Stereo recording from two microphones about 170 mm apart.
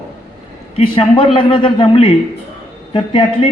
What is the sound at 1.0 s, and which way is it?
A man's voice, 30° left (ahead or behind).